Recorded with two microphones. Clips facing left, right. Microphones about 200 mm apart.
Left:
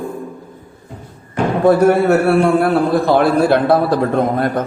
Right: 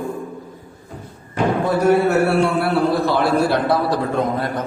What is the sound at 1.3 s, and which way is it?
A man's voice, 50° left (ahead or behind).